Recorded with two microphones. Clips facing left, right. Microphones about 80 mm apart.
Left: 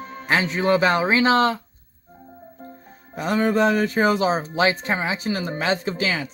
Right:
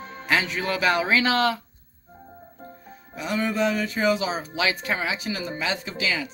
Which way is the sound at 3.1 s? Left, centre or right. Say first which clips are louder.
Left 6 dB; left.